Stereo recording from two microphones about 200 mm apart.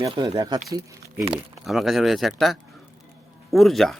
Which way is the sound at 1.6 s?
Centre (ahead or behind).